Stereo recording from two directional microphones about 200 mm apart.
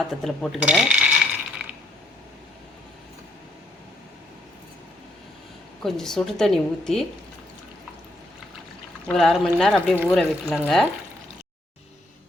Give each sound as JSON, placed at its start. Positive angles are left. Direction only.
{"t": 0.1, "sound": "speech", "side_deg": 0}
{"t": 5.8, "sound": "a woman's voice", "side_deg": 0}
{"t": 9.0, "sound": "a woman's voice", "side_deg": 0}